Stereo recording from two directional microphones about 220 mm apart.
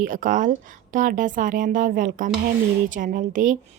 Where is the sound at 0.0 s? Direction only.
35° right (ahead or behind).